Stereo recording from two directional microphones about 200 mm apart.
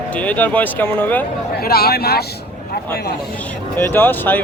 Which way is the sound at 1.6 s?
50° left (ahead or behind).